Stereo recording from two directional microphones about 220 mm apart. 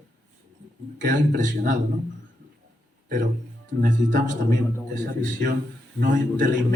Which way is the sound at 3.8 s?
35° right (ahead or behind).